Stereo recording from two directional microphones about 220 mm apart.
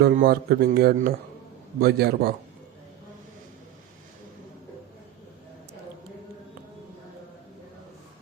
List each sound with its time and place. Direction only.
0.0 s speech: 45° right (ahead or behind)